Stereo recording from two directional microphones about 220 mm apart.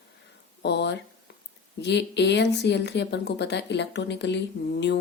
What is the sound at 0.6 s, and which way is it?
Speech, 50° left (ahead or behind).